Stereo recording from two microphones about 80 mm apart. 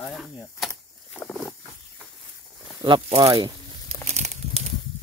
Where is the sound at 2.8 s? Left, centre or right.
Right.